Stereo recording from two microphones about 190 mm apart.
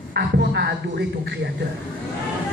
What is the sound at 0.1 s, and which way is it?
A man's voice, 60° right (ahead or behind).